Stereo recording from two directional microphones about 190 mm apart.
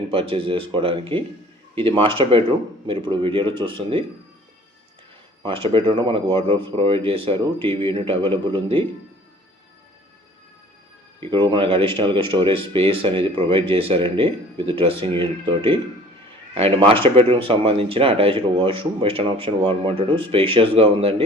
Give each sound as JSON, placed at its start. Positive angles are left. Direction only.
{"t": 0.1, "sound": "speech", "side_deg": -30}
{"t": 5.4, "sound": "speech", "side_deg": -30}
{"t": 11.3, "sound": "speech", "side_deg": -25}